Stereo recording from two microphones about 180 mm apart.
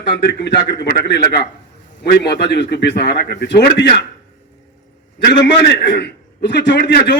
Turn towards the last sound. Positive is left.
turn(degrees=70)  # may be behind; listen again after turning